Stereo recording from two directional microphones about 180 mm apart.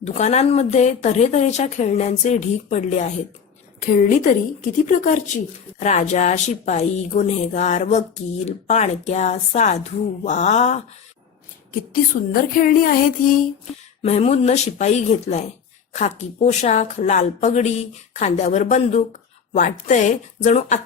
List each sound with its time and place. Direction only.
0.0 s a woman's voice: 35° left (ahead or behind)
12.3 s a woman's voice: 50° left (ahead or behind)
14.0 s a woman's voice: 35° left (ahead or behind)